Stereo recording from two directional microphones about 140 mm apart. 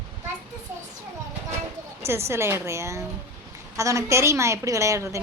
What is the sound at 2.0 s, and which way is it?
A woman's voice, 20° right (ahead or behind).